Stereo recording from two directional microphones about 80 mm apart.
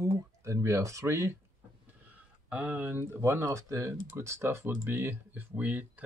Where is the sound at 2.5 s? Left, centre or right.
Centre.